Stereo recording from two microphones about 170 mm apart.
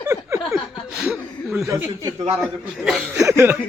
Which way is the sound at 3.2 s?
15° right (ahead or behind).